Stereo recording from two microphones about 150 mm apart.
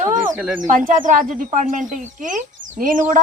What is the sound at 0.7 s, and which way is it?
Speech, 60° right (ahead or behind).